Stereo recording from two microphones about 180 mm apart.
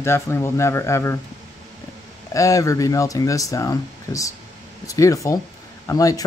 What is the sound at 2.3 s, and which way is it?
Speech, 20° left (ahead or behind).